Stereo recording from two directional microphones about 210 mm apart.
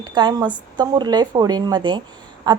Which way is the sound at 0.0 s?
20° right (ahead or behind).